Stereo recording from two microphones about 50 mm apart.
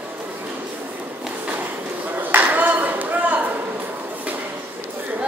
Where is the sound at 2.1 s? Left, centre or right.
Right.